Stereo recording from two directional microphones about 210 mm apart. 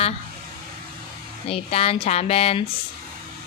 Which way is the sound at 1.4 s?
30° left (ahead or behind).